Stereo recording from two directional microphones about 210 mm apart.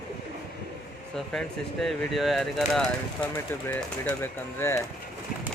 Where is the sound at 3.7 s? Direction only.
10° left (ahead or behind).